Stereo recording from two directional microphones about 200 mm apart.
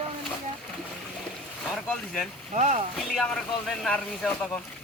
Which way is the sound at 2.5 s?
40° right (ahead or behind).